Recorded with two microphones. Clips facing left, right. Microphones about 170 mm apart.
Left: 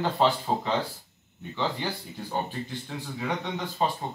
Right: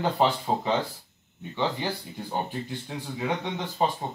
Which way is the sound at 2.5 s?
15° right (ahead or behind).